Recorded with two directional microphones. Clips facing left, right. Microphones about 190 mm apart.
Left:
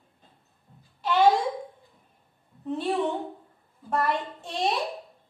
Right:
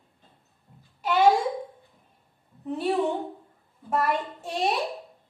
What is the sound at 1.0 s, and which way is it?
Babbling, 10° right (ahead or behind).